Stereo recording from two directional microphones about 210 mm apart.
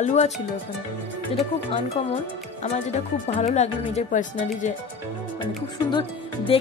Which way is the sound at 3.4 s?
30° left (ahead or behind).